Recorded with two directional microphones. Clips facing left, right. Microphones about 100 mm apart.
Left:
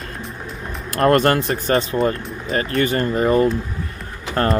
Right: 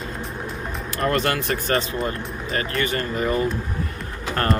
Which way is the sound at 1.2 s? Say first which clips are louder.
Left 5 dB; 30° left (ahead or behind).